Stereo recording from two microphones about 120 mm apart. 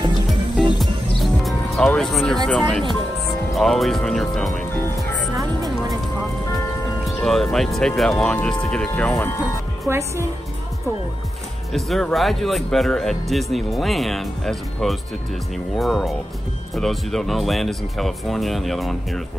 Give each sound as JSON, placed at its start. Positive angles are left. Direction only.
{"t": 0.7, "sound": "music", "side_deg": 0}
{"t": 1.8, "sound": "speech", "side_deg": 5}
{"t": 5.3, "sound": "music", "side_deg": -30}
{"t": 7.2, "sound": "speech", "side_deg": 0}
{"t": 9.8, "sound": "a woman's voice", "side_deg": -25}
{"t": 11.7, "sound": "speech", "side_deg": 0}